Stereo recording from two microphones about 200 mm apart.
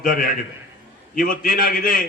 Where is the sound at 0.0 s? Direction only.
45° left (ahead or behind).